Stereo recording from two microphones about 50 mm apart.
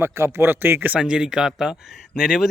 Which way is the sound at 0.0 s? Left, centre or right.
Right.